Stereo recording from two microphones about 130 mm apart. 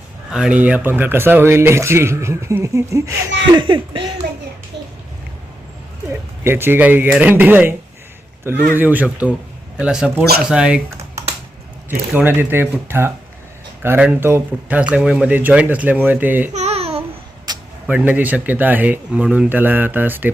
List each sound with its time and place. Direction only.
0.3 s speech: 5° right (ahead or behind); by 3.0 s 25° right (ahead or behind)
3.5 s speech: 40° right (ahead or behind)
6.1 s speech: 20° right (ahead or behind)
11.9 s speech: 15° right (ahead or behind)
16.6 s babbling: 55° right (ahead or behind)
17.5 s a sound: 30° right (ahead or behind)
17.8 s speech: 10° right (ahead or behind)